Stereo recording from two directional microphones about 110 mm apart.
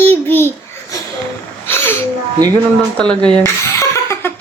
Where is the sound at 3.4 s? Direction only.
25° left (ahead or behind).